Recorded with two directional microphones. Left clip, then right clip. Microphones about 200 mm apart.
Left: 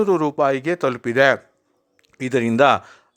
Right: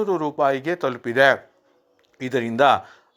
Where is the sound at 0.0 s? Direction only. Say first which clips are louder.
Left 3 dB; 40° left (ahead or behind).